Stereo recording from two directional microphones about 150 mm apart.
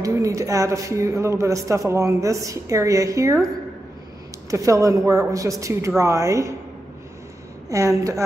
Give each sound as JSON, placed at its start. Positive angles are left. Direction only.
{"t": 0.0, "sound": "a man's voice", "side_deg": -20}
{"t": 4.5, "sound": "a man's voice", "side_deg": -20}
{"t": 7.7, "sound": "a man's voice", "side_deg": -20}